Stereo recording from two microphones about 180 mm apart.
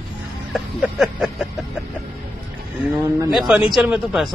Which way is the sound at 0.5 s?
Centre (ahead or behind).